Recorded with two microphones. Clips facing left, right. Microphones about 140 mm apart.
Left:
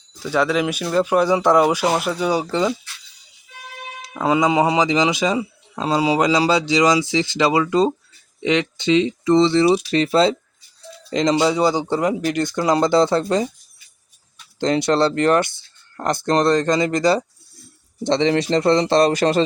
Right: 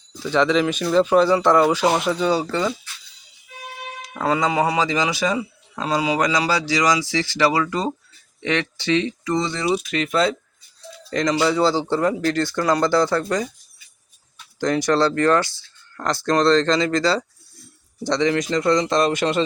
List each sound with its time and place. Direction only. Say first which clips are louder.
0.2 s speech: right 1 dB; 10° left (ahead or behind)
4.1 s speech: left 3 dB; 15° left (ahead or behind)
14.6 s a man's voice: left 1 dB; 25° left (ahead or behind)